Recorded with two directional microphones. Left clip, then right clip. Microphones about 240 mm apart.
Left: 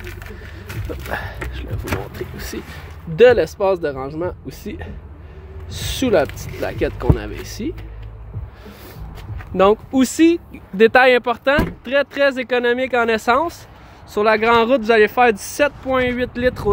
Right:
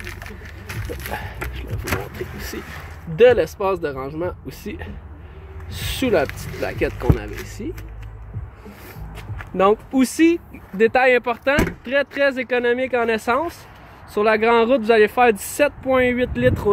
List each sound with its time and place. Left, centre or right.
0.7 s a sound: centre
2.1 s speech: centre
9.6 s speech: centre